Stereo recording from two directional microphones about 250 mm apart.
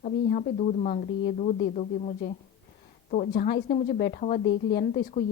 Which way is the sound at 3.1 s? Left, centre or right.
Left.